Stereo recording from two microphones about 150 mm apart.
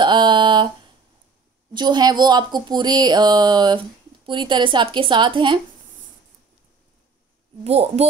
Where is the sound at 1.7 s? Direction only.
30° right (ahead or behind).